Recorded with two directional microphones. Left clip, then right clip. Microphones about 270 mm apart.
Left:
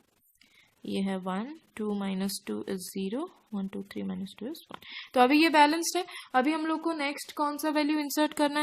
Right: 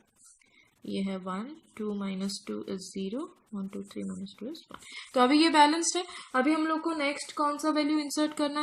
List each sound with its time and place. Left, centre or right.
0.8 s speech: left